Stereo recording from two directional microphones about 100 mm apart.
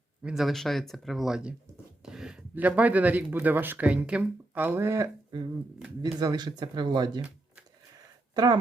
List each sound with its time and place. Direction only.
0.2 s speech: 10° right (ahead or behind)
0.4 s speech: 5° left (ahead or behind); by 5.1 s 30° right (ahead or behind)
6.0 s speech: 45° right (ahead or behind)